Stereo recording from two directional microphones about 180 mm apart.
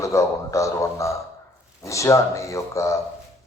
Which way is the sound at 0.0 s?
15° left (ahead or behind).